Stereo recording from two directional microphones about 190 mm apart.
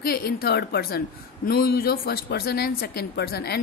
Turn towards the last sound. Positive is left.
turn(degrees=55)  # may be behind; listen again after turning